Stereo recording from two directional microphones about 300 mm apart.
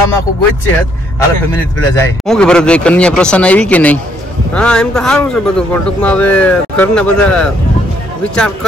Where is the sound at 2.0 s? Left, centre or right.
Centre.